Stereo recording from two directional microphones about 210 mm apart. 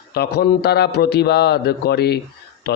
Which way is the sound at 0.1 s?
50° left (ahead or behind).